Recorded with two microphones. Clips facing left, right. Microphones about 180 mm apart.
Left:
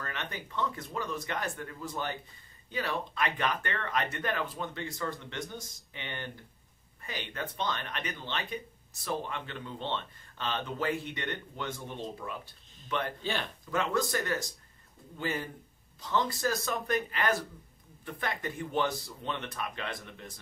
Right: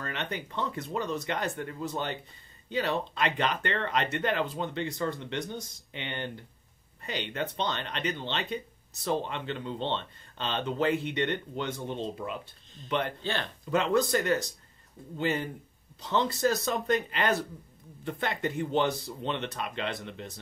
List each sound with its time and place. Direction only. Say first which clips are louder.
0.0 s speech: right 4 dB; 25° right (ahead or behind)
13.2 s speech: right 1 dB; 5° left (ahead or behind)
13.7 s speech: right 5 dB; 20° right (ahead or behind)